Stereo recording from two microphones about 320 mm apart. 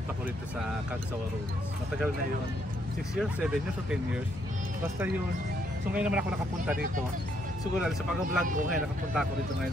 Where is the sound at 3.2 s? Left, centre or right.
Centre.